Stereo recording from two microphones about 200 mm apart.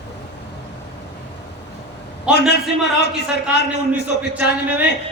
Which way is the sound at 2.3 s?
5° right (ahead or behind).